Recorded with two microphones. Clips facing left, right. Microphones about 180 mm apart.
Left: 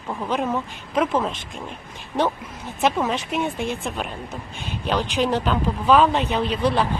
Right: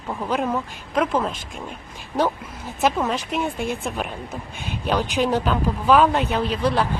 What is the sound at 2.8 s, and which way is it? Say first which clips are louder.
Speech: even; centre (ahead or behind).